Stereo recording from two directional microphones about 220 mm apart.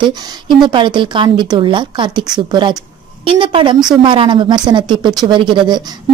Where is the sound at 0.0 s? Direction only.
20° right (ahead or behind).